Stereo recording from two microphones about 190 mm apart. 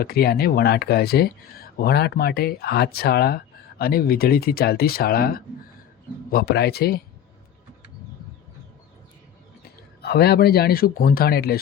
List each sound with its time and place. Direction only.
0.0 s speech: 55° left (ahead or behind)
9.6 s a man's voice: 55° left (ahead or behind)